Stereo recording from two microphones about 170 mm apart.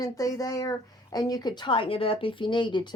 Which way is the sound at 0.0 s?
20° left (ahead or behind).